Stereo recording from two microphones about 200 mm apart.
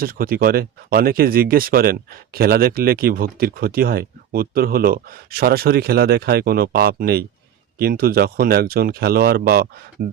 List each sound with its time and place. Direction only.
0.0 s speech: 45° right (ahead or behind)